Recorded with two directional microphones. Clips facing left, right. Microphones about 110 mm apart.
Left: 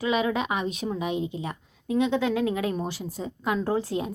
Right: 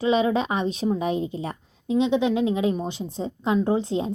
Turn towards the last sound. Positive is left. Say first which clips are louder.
# right 4 dB
turn(degrees=-25)  # may be behind; listen again after turning